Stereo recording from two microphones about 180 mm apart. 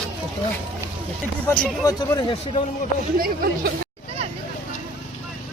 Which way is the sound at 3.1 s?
55° right (ahead or behind).